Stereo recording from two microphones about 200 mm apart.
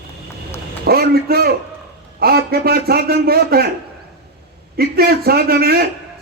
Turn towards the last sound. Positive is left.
turn(degrees=-50)  # may be behind; listen again after turning